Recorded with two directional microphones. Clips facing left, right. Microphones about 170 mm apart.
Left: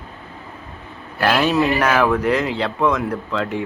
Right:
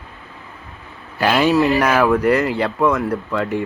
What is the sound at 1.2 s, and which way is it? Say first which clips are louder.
Speech: right 2 dB; 10° right (ahead or behind).